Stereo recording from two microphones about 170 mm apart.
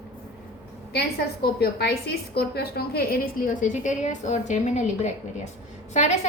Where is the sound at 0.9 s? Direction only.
70° left (ahead or behind).